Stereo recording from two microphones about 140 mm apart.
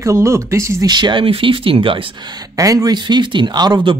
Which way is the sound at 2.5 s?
25° right (ahead or behind).